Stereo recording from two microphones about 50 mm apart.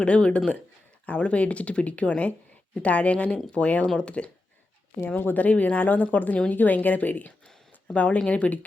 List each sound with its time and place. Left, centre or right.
0.0 s speech: left
4.9 s a woman's voice: left